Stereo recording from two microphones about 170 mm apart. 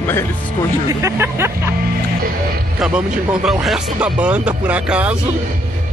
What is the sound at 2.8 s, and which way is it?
Speech, 5° right (ahead or behind).